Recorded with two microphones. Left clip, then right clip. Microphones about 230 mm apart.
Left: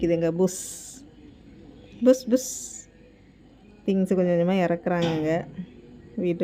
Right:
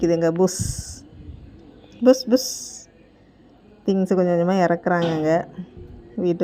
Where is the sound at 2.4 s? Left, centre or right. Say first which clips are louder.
Right 5 dB; left.